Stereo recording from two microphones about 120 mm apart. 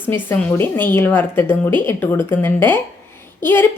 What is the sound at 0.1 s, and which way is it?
A woman's voice, 15° left (ahead or behind).